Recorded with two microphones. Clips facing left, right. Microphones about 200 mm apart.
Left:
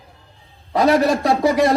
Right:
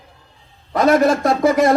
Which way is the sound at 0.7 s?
30° left (ahead or behind).